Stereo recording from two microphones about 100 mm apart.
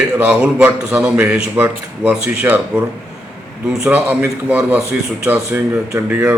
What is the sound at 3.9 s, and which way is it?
A man's voice, 20° right (ahead or behind).